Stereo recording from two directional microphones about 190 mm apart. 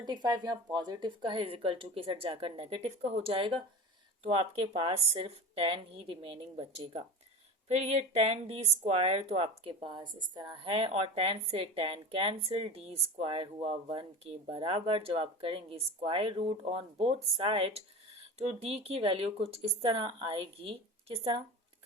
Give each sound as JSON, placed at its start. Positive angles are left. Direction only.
{"t": 0.0, "sound": "speech", "side_deg": -20}